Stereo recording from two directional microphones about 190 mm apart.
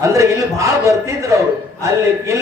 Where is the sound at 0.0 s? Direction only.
15° right (ahead or behind).